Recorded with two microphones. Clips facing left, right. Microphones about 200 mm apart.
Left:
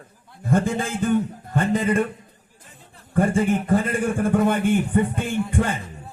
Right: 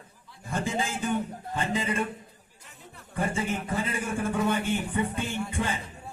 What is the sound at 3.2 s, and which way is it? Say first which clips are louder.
Speech: left 9 dB; 55° left (ahead or behind).